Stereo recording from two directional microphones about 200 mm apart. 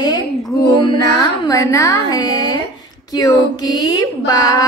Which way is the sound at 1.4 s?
15° left (ahead or behind).